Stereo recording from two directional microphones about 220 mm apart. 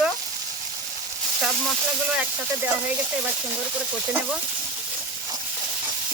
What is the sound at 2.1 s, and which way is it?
Speech, 5° right (ahead or behind).